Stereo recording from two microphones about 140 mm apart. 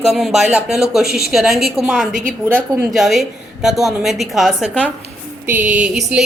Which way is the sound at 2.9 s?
Centre (ahead or behind).